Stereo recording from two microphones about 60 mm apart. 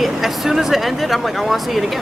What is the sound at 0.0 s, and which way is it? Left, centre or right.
Speech, centre.